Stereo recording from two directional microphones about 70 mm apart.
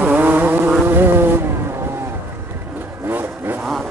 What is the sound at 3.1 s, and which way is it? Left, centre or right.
Vehicle, right.